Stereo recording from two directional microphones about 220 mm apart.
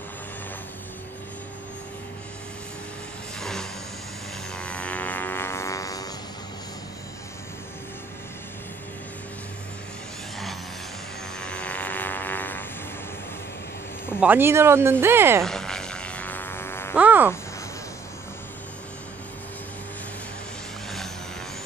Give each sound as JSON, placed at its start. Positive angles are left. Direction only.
{"t": 3.3, "sound": "vehicle", "side_deg": 5}
{"t": 4.6, "sound": "a sound", "side_deg": 5}
{"t": 11.3, "sound": "vehicle", "side_deg": 5}
{"t": 14.2, "sound": "speech", "side_deg": -10}
{"t": 15.4, "sound": "music", "side_deg": 0}
{"t": 16.9, "sound": "speech", "side_deg": -5}